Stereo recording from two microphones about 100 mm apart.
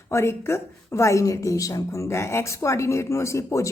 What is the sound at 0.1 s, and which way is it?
Speech, 25° left (ahead or behind).